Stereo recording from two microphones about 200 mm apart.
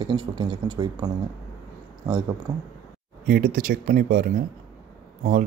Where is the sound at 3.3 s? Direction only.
45° right (ahead or behind).